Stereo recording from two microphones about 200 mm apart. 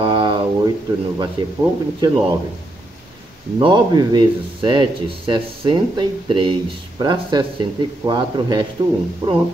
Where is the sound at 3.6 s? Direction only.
20° right (ahead or behind).